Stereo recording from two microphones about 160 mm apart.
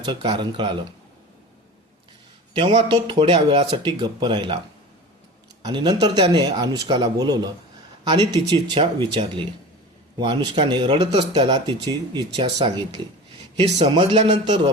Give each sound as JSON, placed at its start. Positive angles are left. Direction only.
{"t": 0.0, "sound": "speech", "side_deg": -30}
{"t": 2.5, "sound": "speech", "side_deg": -35}
{"t": 5.6, "sound": "speech", "side_deg": -30}